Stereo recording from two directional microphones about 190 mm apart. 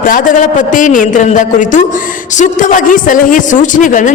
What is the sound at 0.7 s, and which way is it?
A man's voice, 45° left (ahead or behind).